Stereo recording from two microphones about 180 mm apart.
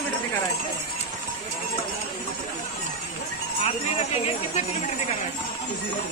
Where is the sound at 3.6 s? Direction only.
35° left (ahead or behind).